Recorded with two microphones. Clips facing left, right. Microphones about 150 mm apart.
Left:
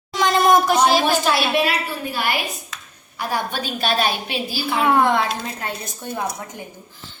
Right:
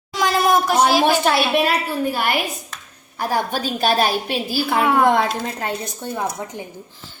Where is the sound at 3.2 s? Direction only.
40° right (ahead or behind).